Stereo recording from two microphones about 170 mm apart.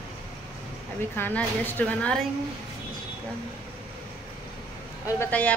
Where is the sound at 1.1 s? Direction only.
10° left (ahead or behind).